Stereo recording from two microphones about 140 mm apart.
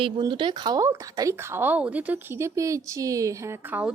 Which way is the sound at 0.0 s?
35° right (ahead or behind).